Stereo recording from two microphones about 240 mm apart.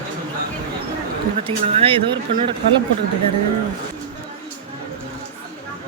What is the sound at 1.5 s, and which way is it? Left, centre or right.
Speech, right.